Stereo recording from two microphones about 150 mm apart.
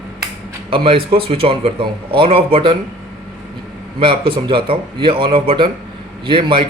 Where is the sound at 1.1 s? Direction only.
40° right (ahead or behind).